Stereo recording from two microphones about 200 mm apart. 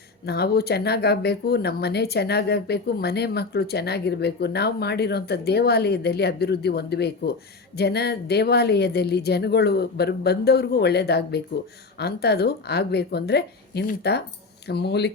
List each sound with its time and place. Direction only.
0.3 s speech: 55° left (ahead or behind)